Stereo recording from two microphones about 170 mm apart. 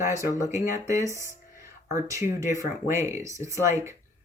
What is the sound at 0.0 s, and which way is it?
Speech, 20° right (ahead or behind).